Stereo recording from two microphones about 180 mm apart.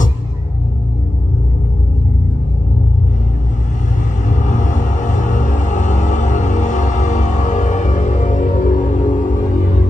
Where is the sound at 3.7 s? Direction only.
45° left (ahead or behind).